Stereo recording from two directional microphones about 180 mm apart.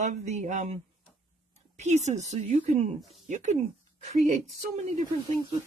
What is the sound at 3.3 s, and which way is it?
Speech, 40° right (ahead or behind).